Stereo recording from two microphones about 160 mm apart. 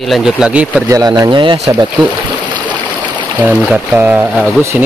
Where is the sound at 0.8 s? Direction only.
20° right (ahead or behind).